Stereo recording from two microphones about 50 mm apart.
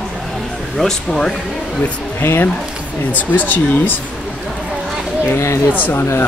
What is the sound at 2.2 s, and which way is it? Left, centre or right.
Speech, left.